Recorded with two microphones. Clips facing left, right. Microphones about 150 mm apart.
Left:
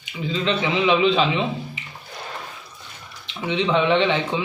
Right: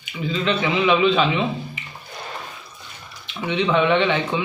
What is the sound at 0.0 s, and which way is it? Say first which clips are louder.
A man's voice: right 1 dB; 30° left (ahead or behind).